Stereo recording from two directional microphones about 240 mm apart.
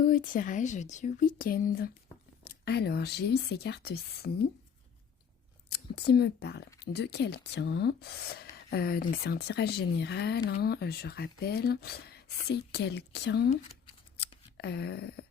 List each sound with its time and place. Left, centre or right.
0.0 s speech: left
5.7 s speech: left
13.5 s speech: left
14.2 s a sound: left